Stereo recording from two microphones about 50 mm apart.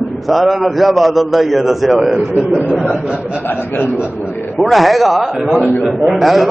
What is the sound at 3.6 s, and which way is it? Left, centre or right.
Speech, left.